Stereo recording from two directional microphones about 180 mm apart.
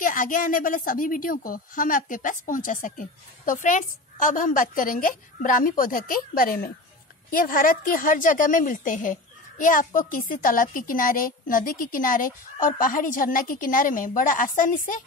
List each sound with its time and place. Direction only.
0.0 s a woman's voice: 50° left (ahead or behind)